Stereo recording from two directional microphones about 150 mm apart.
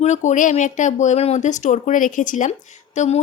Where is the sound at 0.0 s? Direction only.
50° left (ahead or behind).